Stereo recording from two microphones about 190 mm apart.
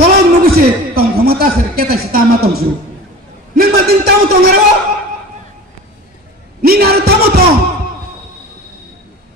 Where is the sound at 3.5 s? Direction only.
55° right (ahead or behind).